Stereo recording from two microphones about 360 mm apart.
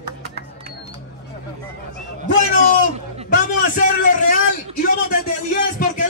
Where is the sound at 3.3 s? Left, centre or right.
Left.